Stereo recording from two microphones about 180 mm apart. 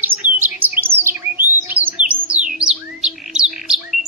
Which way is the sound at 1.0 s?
10° right (ahead or behind).